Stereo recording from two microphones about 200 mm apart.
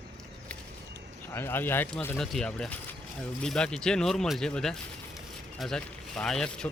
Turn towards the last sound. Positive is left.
turn(degrees=5)  # may be behind; listen again after turning